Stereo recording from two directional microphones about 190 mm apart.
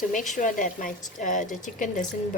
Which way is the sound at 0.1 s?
40° left (ahead or behind).